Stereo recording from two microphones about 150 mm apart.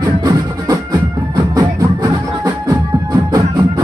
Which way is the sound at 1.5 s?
25° right (ahead or behind).